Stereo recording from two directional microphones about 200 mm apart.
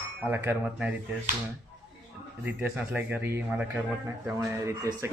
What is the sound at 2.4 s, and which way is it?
A man's voice, 10° right (ahead or behind).